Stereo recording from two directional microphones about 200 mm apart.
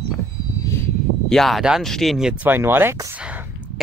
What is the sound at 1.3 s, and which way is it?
Speech, centre (ahead or behind).